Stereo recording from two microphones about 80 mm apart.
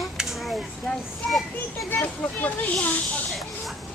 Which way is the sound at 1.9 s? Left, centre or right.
Left.